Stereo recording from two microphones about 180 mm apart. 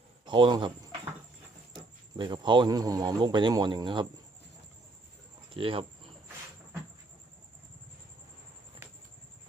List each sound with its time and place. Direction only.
0.3 s speech: 25° right (ahead or behind)
1.7 s speech: 25° right (ahead or behind)
5.5 s speech: 30° right (ahead or behind)